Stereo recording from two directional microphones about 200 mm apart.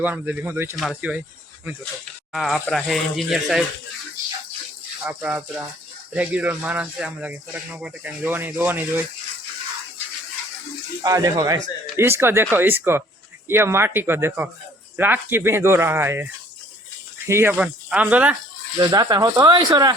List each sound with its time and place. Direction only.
0.0 s speech: 10° right (ahead or behind)
2.3 s speech: centre (ahead or behind)
5.0 s speech: 10° right (ahead or behind)
11.0 s speech: 15° right (ahead or behind)
18.8 s speech: 20° right (ahead or behind)